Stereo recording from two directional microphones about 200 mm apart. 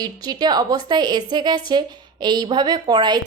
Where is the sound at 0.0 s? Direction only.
20° right (ahead or behind).